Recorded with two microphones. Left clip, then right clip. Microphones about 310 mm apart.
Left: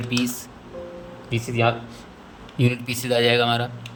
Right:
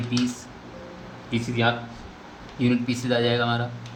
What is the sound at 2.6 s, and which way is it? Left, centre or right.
Speech, left.